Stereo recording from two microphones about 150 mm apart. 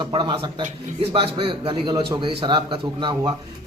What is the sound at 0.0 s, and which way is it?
A man's voice, 30° right (ahead or behind).